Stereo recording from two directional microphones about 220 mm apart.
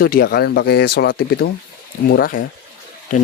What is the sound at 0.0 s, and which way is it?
Speech, 40° left (ahead or behind).